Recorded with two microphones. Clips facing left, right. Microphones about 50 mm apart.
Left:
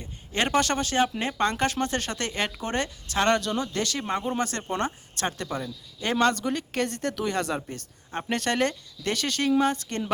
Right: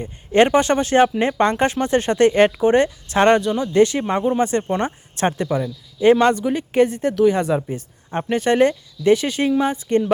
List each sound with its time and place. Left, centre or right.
0.0 s speech: right
3.4 s speech: centre